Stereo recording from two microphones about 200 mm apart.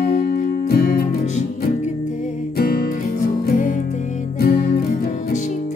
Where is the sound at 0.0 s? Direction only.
50° left (ahead or behind).